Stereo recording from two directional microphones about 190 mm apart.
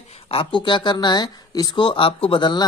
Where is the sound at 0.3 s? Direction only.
25° left (ahead or behind).